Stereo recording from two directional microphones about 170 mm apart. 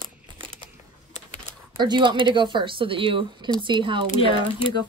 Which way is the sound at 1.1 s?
40° left (ahead or behind).